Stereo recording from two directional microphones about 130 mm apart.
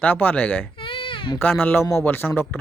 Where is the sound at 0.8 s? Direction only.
40° left (ahead or behind).